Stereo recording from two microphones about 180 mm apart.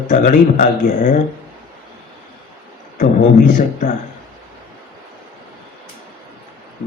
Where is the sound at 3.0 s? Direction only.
45° left (ahead or behind).